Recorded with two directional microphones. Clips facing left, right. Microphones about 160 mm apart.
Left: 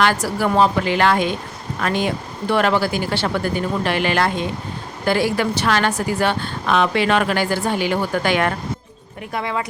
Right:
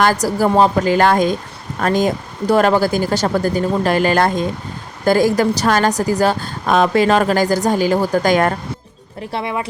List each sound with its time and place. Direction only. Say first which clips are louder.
0.0 s a woman's voice: right 4 dB; 40° right (ahead or behind)
9.3 s speech: right 2 dB; 20° right (ahead or behind)